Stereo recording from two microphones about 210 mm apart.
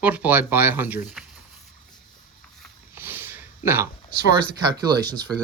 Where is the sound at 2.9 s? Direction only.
10° right (ahead or behind).